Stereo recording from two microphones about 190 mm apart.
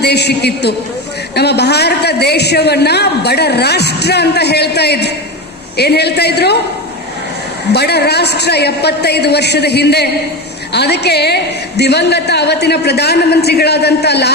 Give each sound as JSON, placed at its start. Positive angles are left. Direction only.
{"t": 0.0, "sound": "a man's voice", "side_deg": 60}
{"t": 7.7, "sound": "a man's voice", "side_deg": 60}